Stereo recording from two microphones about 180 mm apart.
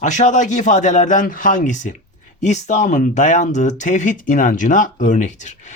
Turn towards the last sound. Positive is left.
turn(degrees=40)  # may be behind; listen again after turning